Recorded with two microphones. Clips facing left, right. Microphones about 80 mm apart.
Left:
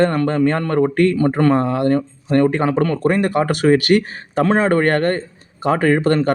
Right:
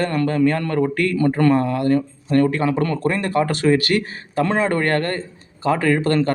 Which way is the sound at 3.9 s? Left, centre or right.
Left.